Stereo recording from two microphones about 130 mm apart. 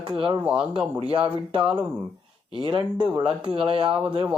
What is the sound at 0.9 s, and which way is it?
Speech, 40° right (ahead or behind).